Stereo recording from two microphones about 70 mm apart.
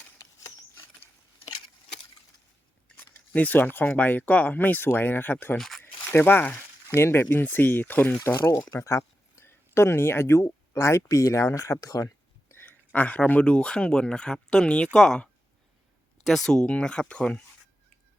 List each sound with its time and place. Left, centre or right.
3.0 s speech: left
5.5 s speech: centre
6.1 s speech: left
8.2 s speech: left
12.5 s speech: left